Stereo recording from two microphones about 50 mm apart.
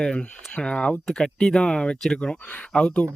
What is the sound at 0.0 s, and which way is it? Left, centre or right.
Speech, centre.